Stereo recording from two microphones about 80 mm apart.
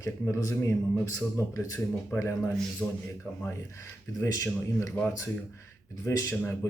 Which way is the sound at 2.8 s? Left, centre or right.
Centre.